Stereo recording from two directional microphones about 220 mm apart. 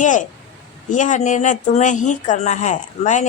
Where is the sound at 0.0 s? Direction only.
35° left (ahead or behind).